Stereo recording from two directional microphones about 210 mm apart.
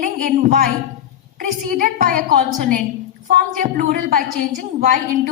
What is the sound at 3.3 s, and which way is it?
A woman's voice, 40° right (ahead or behind).